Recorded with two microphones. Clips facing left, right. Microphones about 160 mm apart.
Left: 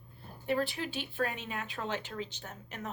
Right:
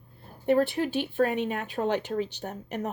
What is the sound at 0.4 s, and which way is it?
A woman's voice, 50° right (ahead or behind).